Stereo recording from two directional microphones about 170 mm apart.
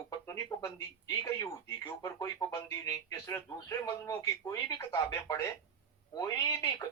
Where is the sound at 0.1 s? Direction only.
20° left (ahead or behind).